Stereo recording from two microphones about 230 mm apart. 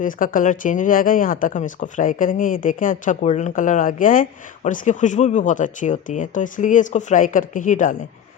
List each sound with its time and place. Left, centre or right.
0.0 s speech: left